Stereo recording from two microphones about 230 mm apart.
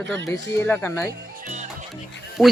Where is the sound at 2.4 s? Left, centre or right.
Centre.